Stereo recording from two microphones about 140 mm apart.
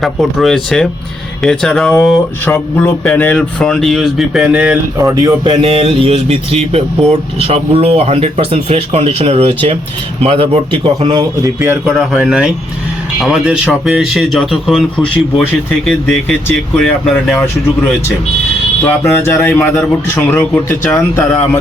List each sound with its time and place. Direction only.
0.0 s speech: centre (ahead or behind)
4.9 s speech: 25° right (ahead or behind)
5.6 s a man's voice: 40° right (ahead or behind)
11.9 s speech: 5° right (ahead or behind)
16.7 s speech: centre (ahead or behind)
18.9 s speech: 15° left (ahead or behind)
20.8 s speech: 15° left (ahead or behind)